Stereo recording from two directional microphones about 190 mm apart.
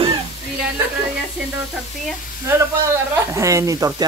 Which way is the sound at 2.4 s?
10° right (ahead or behind).